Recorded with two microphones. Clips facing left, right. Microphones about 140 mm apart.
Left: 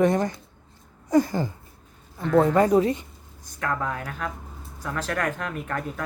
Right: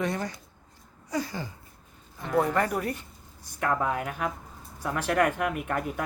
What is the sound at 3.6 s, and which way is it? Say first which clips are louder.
Speech: right 1 dB; 15° right (ahead or behind).